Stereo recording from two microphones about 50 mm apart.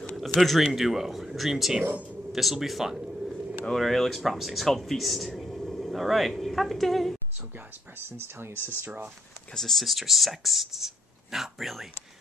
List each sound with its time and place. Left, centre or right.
0.4 s speech: centre
3.7 s speech: centre
8.2 s speech: right
8.8 s speech: right
9.6 s speech: centre